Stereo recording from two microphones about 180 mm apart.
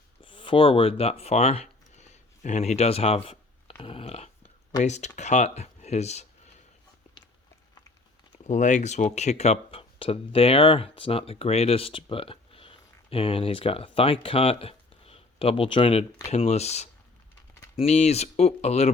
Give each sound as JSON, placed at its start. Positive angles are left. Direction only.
{"t": 0.2, "sound": "speech", "side_deg": 30}
{"t": 8.4, "sound": "speech", "side_deg": 45}